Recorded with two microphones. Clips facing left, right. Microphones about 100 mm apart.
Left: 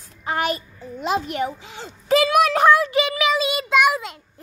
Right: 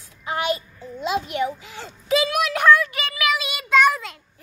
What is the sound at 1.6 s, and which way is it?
Speech, 20° left (ahead or behind).